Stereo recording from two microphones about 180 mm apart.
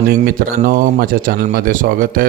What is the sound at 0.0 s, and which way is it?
Speech, 55° right (ahead or behind).